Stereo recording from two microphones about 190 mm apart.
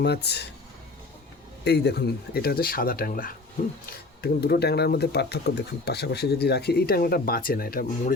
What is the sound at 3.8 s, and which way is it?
Speech, 55° left (ahead or behind).